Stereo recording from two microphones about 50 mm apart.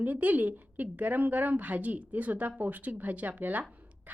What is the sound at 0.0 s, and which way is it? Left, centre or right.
A woman's voice, right.